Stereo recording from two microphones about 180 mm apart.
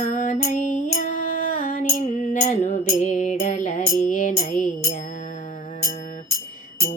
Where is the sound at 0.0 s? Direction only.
45° left (ahead or behind).